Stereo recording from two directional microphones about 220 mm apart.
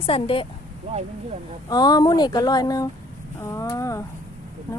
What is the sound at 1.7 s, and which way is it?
Speech, 20° left (ahead or behind).